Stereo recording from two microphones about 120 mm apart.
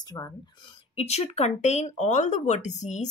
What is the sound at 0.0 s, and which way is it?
Speech, 30° left (ahead or behind).